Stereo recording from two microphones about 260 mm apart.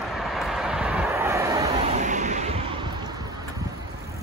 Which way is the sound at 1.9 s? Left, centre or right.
Right.